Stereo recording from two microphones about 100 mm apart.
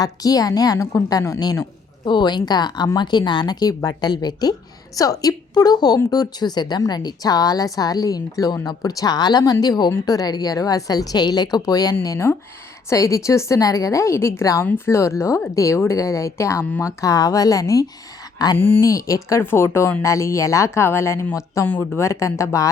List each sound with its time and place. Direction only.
0.0 s a woman's voice: 40° left (ahead or behind)
2.0 s a woman's voice: 50° left (ahead or behind)
18.5 s speech: 20° left (ahead or behind)
18.8 s a woman's voice: 35° left (ahead or behind)
19.4 s speech: 25° left (ahead or behind)